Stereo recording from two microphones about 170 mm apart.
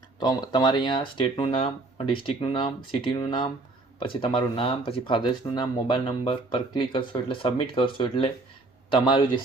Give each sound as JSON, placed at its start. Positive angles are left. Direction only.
{"t": 0.2, "sound": "speech", "side_deg": 25}